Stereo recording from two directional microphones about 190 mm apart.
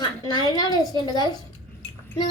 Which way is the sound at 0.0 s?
20° left (ahead or behind).